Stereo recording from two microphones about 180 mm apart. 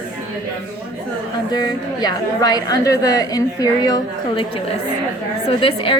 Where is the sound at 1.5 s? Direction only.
20° left (ahead or behind).